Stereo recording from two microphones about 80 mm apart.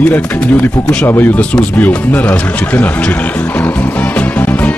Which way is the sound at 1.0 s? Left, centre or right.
Left.